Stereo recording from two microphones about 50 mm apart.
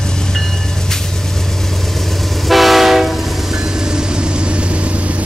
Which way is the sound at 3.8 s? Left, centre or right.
Centre.